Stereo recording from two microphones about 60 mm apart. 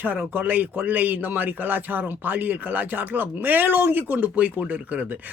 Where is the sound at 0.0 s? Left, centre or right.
Right.